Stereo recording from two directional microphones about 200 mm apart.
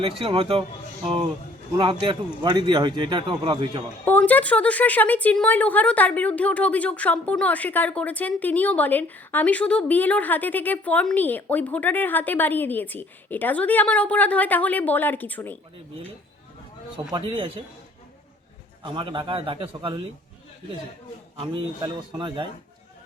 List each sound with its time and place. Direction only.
0.0 s a man's voice: 25° right (ahead or behind)
4.0 s a woman's voice: 10° left (ahead or behind)
17.1 s a man's voice: 25° right (ahead or behind)
18.8 s a man's voice: 25° right (ahead or behind)
21.3 s a man's voice: 25° right (ahead or behind)